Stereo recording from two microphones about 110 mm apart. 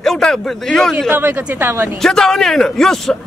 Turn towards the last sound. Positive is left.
turn(degrees=5)  # may be behind; listen again after turning